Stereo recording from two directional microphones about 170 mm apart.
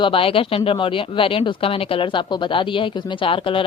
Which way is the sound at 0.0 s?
30° left (ahead or behind).